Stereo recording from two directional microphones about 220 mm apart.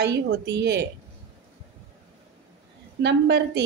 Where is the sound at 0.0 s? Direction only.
50° right (ahead or behind).